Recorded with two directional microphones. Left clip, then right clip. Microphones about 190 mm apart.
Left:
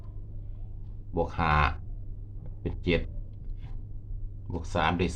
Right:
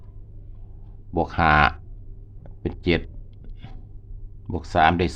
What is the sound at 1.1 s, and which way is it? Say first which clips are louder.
Speech: right 8 dB; 50° right (ahead or behind).